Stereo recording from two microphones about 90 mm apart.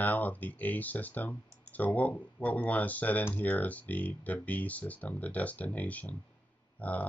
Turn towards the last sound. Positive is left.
turn(degrees=15)  # may be behind; listen again after turning